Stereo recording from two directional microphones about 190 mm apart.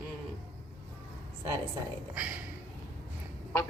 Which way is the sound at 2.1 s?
10° right (ahead or behind).